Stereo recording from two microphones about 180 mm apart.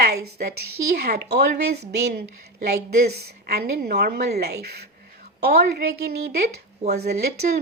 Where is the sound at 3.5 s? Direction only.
60° right (ahead or behind).